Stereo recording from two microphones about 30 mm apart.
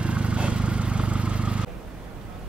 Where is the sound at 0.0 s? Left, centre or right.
Right.